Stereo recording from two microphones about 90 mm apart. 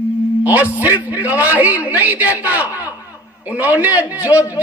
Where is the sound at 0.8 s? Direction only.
20° right (ahead or behind).